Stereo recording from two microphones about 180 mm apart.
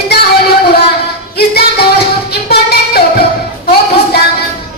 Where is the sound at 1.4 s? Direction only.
60° left (ahead or behind).